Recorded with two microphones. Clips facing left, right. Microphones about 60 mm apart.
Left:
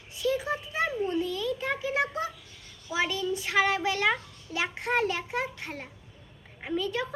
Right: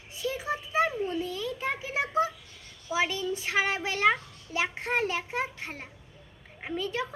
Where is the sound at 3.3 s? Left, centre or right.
Right.